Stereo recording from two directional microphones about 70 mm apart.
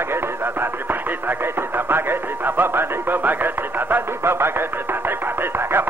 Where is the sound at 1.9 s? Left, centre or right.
Right.